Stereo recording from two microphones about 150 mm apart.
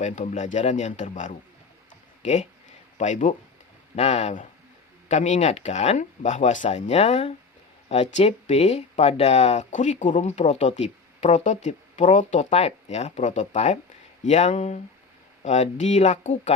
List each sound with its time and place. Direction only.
0.0 s speech: 50° left (ahead or behind)